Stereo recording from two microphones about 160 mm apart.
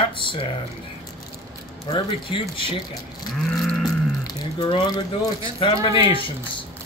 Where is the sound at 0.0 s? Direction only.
30° left (ahead or behind).